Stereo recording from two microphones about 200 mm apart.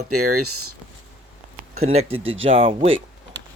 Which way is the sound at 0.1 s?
90° right.